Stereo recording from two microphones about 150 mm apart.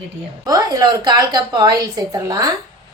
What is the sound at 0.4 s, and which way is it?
A woman's voice, 25° right (ahead or behind).